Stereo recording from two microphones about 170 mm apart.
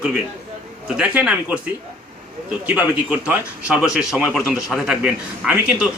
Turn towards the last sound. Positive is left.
turn(degrees=-5)  # may be behind; listen again after turning